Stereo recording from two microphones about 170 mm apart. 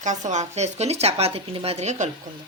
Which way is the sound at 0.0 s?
45° right (ahead or behind).